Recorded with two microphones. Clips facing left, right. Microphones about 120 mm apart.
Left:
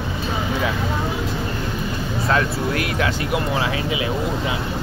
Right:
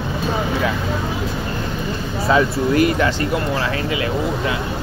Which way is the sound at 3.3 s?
15° left (ahead or behind).